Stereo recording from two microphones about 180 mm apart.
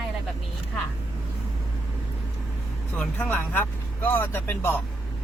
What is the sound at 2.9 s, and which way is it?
Speech, 10° left (ahead or behind).